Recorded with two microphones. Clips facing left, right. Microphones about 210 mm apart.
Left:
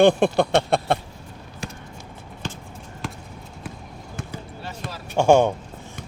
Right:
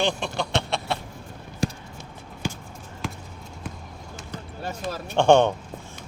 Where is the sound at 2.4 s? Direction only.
10° right (ahead or behind).